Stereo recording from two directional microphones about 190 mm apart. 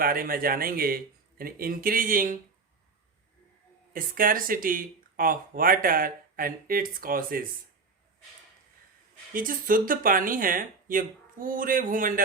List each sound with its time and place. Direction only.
0.0 s speech: 50° right (ahead or behind)
3.9 s speech: 50° right (ahead or behind)
9.3 s speech: 45° right (ahead or behind)